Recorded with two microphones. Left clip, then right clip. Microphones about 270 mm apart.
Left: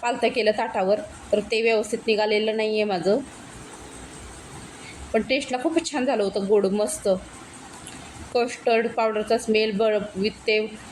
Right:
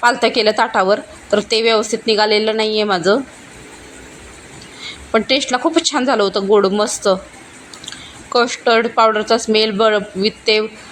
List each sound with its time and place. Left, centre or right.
0.0 s speech: centre
5.1 s speech: centre
8.3 s speech: centre